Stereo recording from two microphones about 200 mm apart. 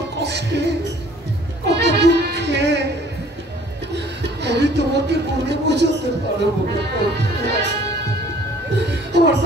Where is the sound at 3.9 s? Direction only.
60° right (ahead or behind).